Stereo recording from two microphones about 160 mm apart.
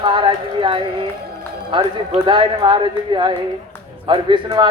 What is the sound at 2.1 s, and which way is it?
A woman's voice, 30° right (ahead or behind).